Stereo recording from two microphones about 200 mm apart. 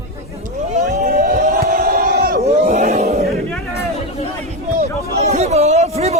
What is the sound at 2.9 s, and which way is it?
Choir, 35° right (ahead or behind).